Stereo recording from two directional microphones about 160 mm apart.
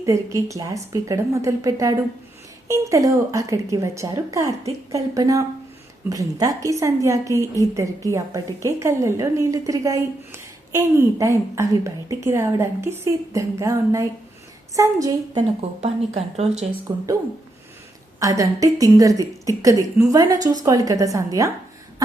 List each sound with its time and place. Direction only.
0.0 s a woman's voice: 20° right (ahead or behind)
15.8 s speech: 40° right (ahead or behind)
16.9 s a woman's voice: 30° right (ahead or behind)
18.2 s a woman's voice: 20° right (ahead or behind)